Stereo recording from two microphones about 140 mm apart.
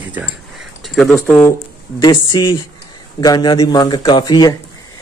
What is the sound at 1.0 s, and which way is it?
Speech, 10° left (ahead or behind).